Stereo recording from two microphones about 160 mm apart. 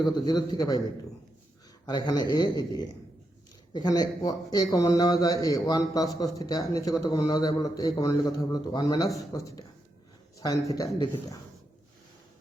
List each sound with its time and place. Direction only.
0.0 s speech: 25° left (ahead or behind)
1.9 s speech: 25° left (ahead or behind)